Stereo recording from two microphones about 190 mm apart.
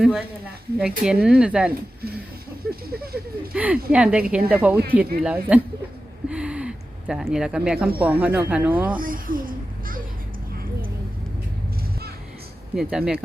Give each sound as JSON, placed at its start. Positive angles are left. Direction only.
{"t": 0.0, "sound": "speech", "side_deg": -5}
{"t": 2.6, "sound": "speech", "side_deg": -55}
{"t": 3.5, "sound": "speech", "side_deg": -5}
{"t": 6.2, "sound": "a sound", "side_deg": -5}
{"t": 7.9, "sound": "speech", "side_deg": -10}
{"t": 9.0, "sound": "a sound", "side_deg": -50}
{"t": 12.7, "sound": "speech", "side_deg": -5}